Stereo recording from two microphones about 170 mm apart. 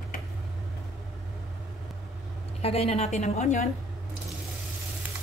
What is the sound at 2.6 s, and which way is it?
A woman's voice, 35° left (ahead or behind).